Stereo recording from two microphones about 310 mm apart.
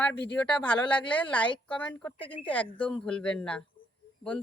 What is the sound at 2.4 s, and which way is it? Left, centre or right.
A woman's voice, centre.